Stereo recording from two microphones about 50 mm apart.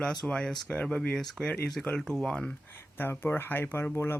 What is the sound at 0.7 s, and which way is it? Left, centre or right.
Speech, left.